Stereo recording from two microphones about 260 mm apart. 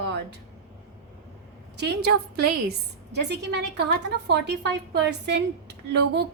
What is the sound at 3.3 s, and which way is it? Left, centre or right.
A woman's voice, right.